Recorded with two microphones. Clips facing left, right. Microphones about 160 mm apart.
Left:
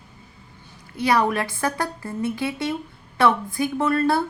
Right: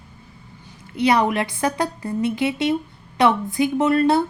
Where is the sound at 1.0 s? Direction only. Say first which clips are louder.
Right 2 dB; 20° right (ahead or behind).